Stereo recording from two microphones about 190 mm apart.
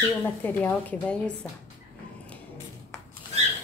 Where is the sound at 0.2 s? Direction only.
10° left (ahead or behind).